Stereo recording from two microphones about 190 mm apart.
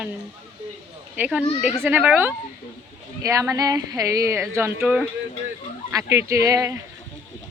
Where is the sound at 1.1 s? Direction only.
10° right (ahead or behind).